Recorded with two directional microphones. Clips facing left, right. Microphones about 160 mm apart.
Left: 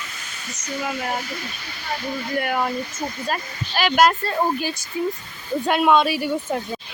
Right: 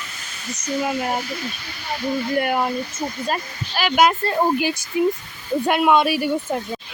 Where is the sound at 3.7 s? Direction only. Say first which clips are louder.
Even; centre (ahead or behind).